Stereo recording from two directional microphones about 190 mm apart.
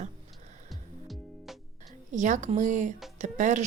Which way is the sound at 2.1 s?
40° right (ahead or behind).